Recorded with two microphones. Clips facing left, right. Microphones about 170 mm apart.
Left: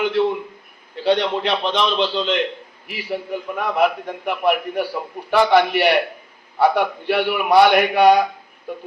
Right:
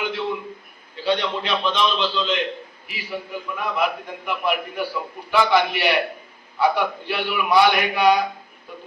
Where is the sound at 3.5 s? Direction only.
55° left (ahead or behind).